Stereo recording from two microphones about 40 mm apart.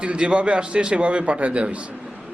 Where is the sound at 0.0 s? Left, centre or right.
Right.